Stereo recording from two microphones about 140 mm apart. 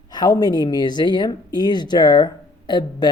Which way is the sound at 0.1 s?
30° left (ahead or behind).